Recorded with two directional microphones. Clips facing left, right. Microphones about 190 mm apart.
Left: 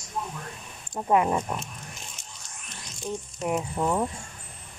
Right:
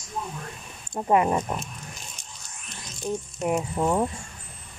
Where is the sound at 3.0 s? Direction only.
5° right (ahead or behind).